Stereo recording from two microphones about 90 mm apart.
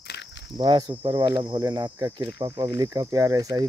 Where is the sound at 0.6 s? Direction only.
55° right (ahead or behind).